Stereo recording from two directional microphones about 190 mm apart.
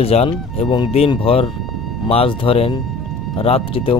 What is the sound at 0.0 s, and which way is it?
Speech, 30° left (ahead or behind).